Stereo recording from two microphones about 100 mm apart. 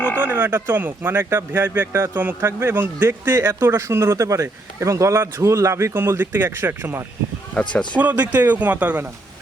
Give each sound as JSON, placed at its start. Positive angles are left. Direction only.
{"t": 0.2, "sound": "speech", "side_deg": -20}
{"t": 7.5, "sound": "speech", "side_deg": 10}
{"t": 7.9, "sound": "speech", "side_deg": -15}